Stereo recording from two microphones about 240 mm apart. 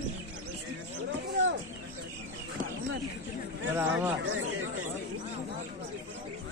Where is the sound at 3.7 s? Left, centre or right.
Centre.